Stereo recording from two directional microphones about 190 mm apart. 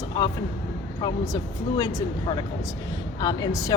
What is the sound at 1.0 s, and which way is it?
Speech, 20° left (ahead or behind).